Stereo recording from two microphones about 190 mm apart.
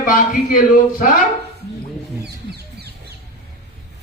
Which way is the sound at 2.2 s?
60° right (ahead or behind).